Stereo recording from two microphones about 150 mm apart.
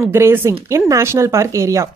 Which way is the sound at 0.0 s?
15° right (ahead or behind).